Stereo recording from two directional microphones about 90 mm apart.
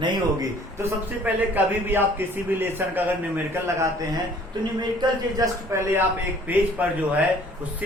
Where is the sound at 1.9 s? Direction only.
25° right (ahead or behind).